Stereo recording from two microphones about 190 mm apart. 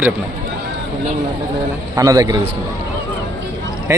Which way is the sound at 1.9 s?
15° right (ahead or behind).